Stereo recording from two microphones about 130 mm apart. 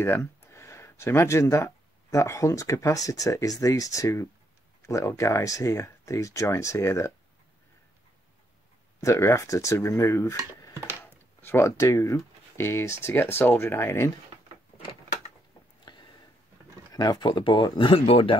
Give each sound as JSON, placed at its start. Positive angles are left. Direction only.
{"t": 0.0, "sound": "speech", "side_deg": 20}
{"t": 9.0, "sound": "speech", "side_deg": 20}
{"t": 15.8, "sound": "a sound", "side_deg": 35}
{"t": 16.9, "sound": "speech", "side_deg": 30}